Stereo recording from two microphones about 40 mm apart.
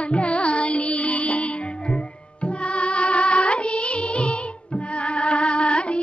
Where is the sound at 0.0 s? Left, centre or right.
Left.